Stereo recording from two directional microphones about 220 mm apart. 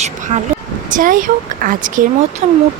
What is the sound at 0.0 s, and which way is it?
Vehicle, 30° right (ahead or behind).